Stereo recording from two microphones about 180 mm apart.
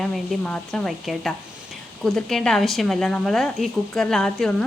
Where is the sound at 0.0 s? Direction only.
Centre (ahead or behind).